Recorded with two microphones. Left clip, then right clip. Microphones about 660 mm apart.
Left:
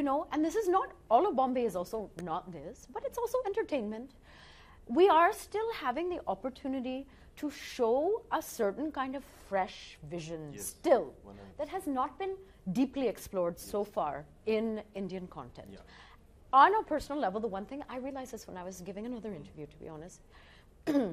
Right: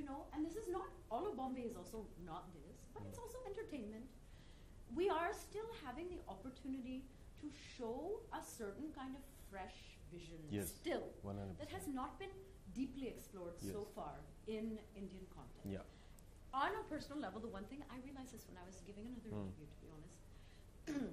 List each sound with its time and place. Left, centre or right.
0.0 s a woman's voice: left
4.9 s a woman's voice: left
16.4 s a woman's voice: left
20.8 s speech: left